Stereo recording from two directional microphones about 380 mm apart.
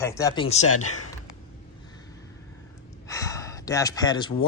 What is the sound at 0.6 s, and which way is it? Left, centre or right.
Speech, left.